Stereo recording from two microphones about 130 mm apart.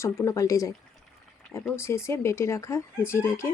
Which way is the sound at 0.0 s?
20° left (ahead or behind).